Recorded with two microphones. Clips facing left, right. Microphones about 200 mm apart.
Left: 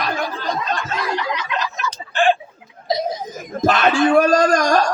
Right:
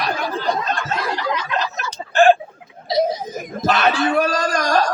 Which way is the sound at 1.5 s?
40° right (ahead or behind).